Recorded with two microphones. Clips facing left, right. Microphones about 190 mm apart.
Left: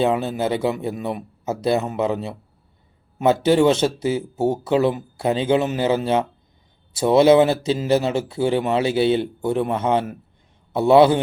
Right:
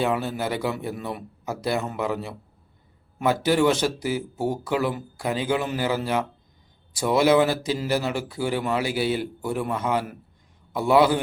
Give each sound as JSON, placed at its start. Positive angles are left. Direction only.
{"t": 0.0, "sound": "speech", "side_deg": 20}